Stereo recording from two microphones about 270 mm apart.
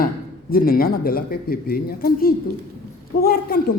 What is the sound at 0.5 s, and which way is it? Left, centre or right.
A woman's voice, left.